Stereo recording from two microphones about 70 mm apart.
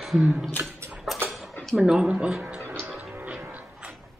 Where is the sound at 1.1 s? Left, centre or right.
Centre.